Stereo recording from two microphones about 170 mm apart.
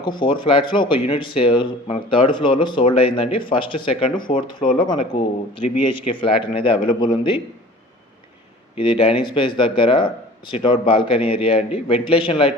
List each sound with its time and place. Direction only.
0.0 s speech: 30° left (ahead or behind)
8.7 s speech: 30° left (ahead or behind)